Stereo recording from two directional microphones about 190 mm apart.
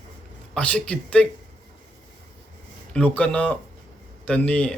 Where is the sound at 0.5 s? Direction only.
5° left (ahead or behind).